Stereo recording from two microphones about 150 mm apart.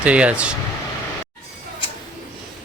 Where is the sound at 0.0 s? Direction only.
10° right (ahead or behind).